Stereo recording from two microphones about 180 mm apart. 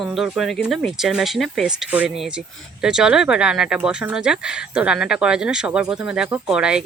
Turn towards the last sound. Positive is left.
turn(degrees=-5)  # may be behind; listen again after turning